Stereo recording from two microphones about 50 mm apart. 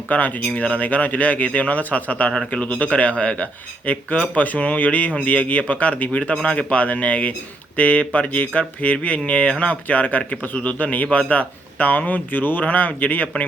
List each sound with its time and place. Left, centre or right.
0.1 s speech: left